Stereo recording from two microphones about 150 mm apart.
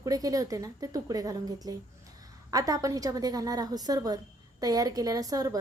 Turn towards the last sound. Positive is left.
turn(degrees=-25)  # may be behind; listen again after turning